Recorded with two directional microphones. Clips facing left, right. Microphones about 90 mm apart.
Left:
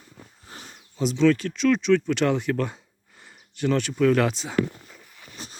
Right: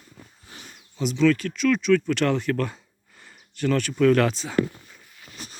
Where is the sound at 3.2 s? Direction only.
20° left (ahead or behind).